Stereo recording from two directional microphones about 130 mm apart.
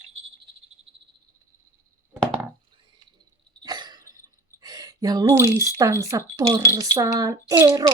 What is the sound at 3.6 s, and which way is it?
Sneeze, 35° right (ahead or behind).